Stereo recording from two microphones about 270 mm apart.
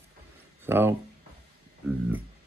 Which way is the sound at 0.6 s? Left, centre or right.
Centre.